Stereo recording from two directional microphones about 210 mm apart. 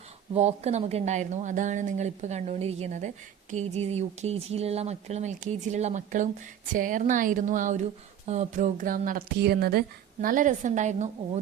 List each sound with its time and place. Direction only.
0.3 s a woman's voice: 30° right (ahead or behind)